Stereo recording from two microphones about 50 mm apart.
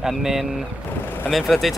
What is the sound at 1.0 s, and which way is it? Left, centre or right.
Speech, left.